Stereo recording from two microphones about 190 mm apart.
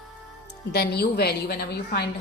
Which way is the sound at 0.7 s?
60° left (ahead or behind).